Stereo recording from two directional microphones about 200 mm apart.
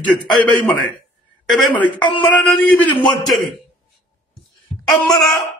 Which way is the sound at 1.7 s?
25° left (ahead or behind).